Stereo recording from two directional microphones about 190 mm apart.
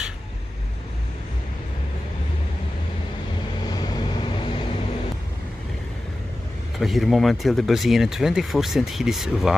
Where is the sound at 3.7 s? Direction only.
20° left (ahead or behind).